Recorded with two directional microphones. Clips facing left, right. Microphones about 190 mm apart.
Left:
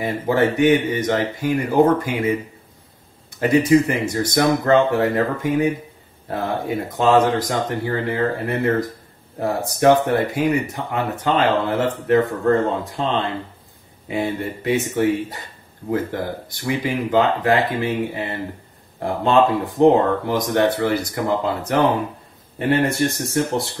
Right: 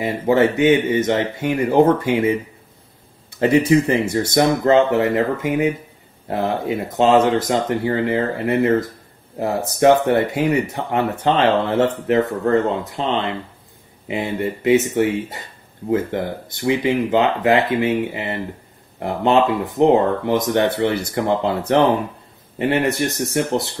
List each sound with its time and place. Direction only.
0.0 s speech: 20° right (ahead or behind)
3.4 s speech: 25° right (ahead or behind)